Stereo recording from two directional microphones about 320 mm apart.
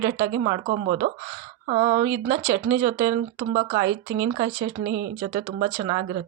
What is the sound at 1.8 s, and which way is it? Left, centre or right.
Speech, centre.